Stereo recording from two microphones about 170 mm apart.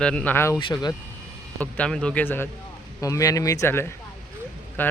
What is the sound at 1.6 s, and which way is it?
A man's voice, 5° left (ahead or behind).